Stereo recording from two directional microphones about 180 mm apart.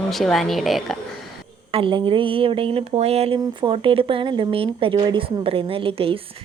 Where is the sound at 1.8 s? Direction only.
30° right (ahead or behind).